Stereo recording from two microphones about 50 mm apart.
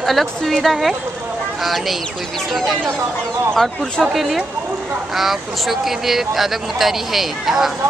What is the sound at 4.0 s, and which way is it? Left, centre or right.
Speech, centre.